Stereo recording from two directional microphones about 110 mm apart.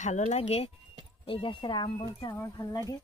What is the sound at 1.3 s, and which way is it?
Speech, 50° left (ahead or behind).